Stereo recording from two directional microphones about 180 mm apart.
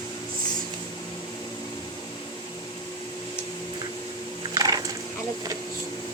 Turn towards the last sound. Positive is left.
turn(degrees=-20)  # may be behind; listen again after turning